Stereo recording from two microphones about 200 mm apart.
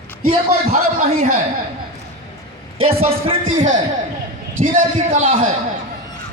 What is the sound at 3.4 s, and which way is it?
Speech, 80° right.